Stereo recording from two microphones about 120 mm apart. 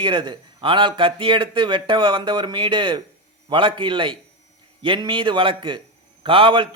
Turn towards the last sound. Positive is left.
turn(degrees=-45)  # may be behind; listen again after turning